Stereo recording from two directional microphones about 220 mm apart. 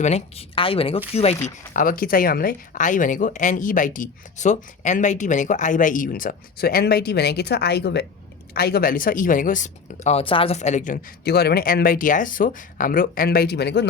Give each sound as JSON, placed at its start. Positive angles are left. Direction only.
{"t": 0.0, "sound": "speech", "side_deg": 30}
{"t": 1.7, "sound": "speech", "side_deg": 40}